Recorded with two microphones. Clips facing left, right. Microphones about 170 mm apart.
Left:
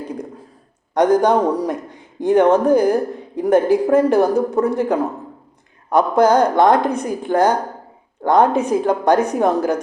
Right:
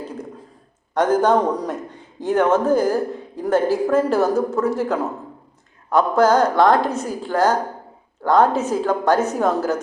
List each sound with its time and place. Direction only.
0.0 s a sound: 15° left (ahead or behind)
0.9 s a man's voice: 15° left (ahead or behind)
5.9 s a man's voice: 15° left (ahead or behind)